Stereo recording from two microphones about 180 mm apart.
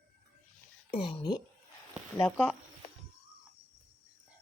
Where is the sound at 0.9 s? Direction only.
30° left (ahead or behind).